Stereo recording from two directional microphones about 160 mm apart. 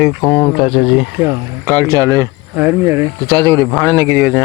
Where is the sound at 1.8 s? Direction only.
15° left (ahead or behind).